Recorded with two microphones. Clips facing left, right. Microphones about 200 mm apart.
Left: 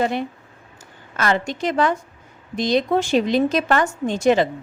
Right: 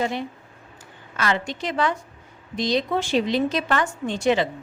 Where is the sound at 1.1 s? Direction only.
45° left (ahead or behind).